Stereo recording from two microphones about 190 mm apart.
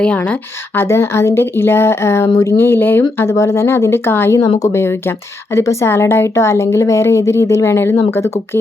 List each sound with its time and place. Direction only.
0.0 s speech: 5° left (ahead or behind)